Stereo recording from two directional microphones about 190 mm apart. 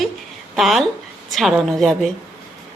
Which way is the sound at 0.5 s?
Centre (ahead or behind).